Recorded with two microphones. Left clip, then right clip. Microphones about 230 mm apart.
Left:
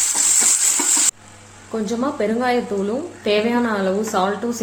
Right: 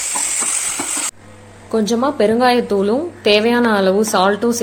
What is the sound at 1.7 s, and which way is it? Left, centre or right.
A woman's voice, right.